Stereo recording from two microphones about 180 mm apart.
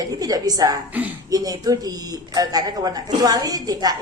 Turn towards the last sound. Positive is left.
turn(degrees=-20)  # may be behind; listen again after turning